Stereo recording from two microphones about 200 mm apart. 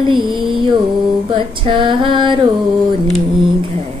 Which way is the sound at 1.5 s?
25° right (ahead or behind).